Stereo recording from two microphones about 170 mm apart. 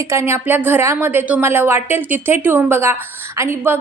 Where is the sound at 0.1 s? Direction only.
15° right (ahead or behind).